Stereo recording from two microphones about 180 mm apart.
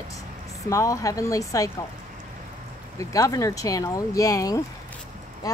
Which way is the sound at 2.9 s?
20° left (ahead or behind).